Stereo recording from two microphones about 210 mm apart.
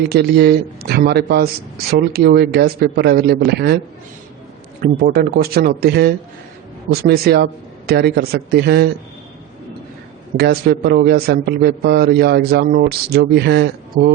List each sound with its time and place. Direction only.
0.1 s a man's voice: 50° right (ahead or behind)
4.8 s a man's voice: 45° right (ahead or behind)
10.3 s a man's voice: 50° right (ahead or behind)